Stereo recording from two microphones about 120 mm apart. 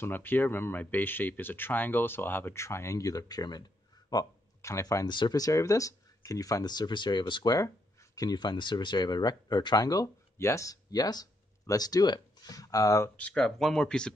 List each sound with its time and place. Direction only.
0.0 s speech: 15° left (ahead or behind)
13.1 s speech: 10° left (ahead or behind)